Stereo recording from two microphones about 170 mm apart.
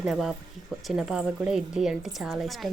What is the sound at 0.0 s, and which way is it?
A woman's voice, centre (ahead or behind).